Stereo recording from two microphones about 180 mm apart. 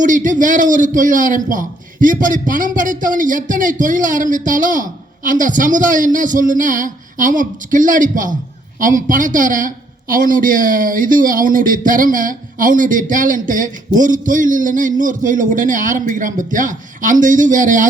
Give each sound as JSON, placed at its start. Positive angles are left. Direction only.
{"t": 0.0, "sound": "a man's voice", "side_deg": -45}